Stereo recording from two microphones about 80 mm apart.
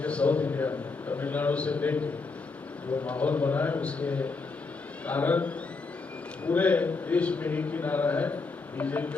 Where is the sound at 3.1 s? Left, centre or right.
Centre.